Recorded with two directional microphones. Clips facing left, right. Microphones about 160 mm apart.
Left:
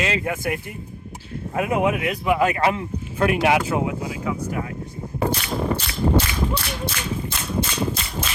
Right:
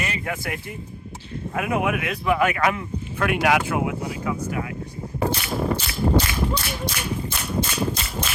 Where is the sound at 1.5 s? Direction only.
25° left (ahead or behind).